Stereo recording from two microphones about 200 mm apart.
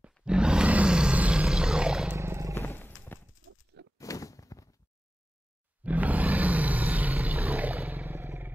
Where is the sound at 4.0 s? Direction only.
15° left (ahead or behind).